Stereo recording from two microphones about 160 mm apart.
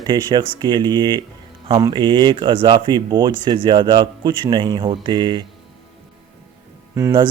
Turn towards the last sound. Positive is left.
turn(degrees=-20)  # may be behind; listen again after turning